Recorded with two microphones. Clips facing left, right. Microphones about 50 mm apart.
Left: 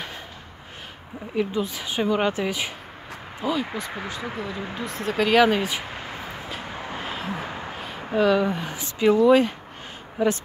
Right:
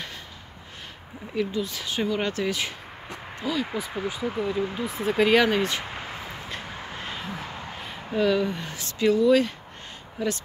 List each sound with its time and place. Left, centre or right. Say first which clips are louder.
1.3 s speech: left 2 dB; left
4.4 s speech: right 4 dB; centre
5.4 s speech: left 3 dB; centre
5.9 s a sound: left 1 dB; centre
8.1 s speech: left 3 dB; centre